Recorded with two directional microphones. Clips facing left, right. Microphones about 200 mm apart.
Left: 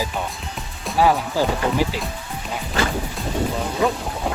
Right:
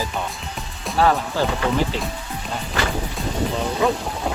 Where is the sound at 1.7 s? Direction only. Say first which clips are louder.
Even; 5° left (ahead or behind).